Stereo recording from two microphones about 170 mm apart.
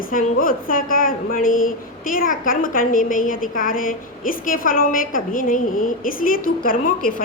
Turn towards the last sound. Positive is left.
turn(degrees=55)  # may be behind; listen again after turning